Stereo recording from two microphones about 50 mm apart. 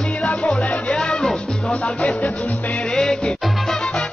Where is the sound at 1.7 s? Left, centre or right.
Left.